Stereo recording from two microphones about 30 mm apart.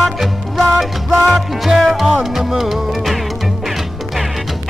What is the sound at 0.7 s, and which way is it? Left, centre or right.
Music, right.